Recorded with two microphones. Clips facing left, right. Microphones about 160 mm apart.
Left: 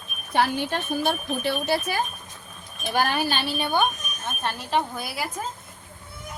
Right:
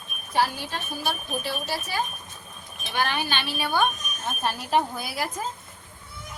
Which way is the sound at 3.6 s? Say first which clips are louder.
Even; 20° left (ahead or behind).